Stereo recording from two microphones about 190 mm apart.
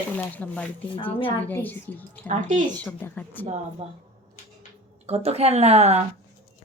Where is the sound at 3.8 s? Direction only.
30° right (ahead or behind).